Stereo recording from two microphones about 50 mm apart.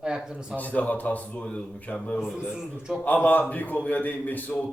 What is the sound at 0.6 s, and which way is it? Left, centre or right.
Speech, left.